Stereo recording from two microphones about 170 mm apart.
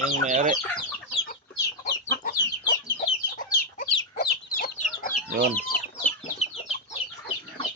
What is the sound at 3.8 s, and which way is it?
Chicken, 50° left (ahead or behind).